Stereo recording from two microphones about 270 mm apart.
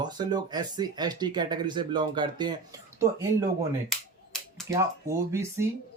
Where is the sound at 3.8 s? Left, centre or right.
Centre.